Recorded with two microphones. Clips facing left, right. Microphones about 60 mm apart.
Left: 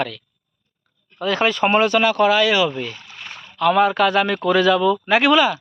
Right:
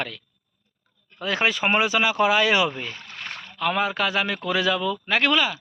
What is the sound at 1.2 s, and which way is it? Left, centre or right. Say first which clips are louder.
Speech: left 5 dB; centre.